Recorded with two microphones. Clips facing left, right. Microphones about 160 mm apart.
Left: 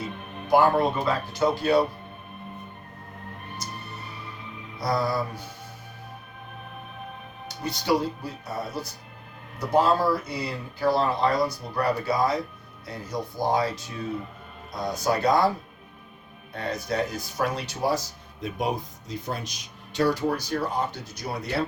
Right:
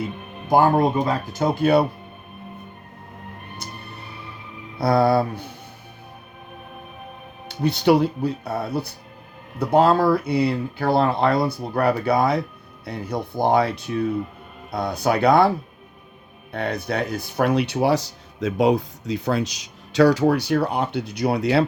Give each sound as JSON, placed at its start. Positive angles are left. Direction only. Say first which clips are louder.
{"t": 0.4, "sound": "speech", "louder": "right 3 dB", "side_deg": -45}
{"t": 4.8, "sound": "speech", "louder": "right 8 dB", "side_deg": -65}
{"t": 7.4, "sound": "speech", "louder": "right 9 dB", "side_deg": -65}
{"t": 19.9, "sound": "speech", "louder": "right 8 dB", "side_deg": -90}